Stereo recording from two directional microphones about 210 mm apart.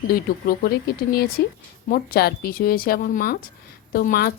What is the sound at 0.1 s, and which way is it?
A woman's voice, 45° left (ahead or behind).